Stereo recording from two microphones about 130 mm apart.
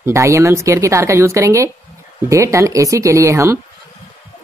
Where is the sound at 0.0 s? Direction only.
20° right (ahead or behind).